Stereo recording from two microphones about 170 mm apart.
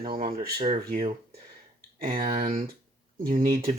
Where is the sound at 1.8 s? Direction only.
55° right (ahead or behind).